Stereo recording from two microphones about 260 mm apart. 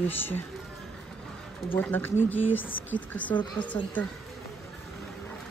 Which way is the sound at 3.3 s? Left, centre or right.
Centre.